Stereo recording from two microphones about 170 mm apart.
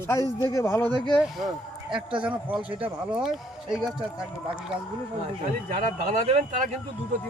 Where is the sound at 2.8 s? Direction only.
5° right (ahead or behind).